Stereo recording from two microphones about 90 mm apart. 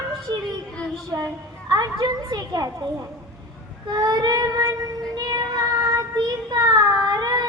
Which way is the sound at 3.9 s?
50° right (ahead or behind).